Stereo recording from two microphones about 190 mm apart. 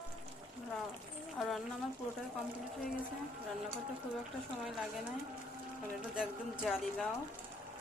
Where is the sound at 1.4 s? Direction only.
Centre (ahead or behind).